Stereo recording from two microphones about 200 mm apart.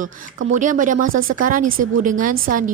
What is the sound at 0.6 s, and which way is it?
A woman's voice, 40° right (ahead or behind).